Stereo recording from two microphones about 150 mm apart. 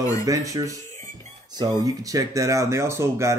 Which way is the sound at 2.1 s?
20° right (ahead or behind).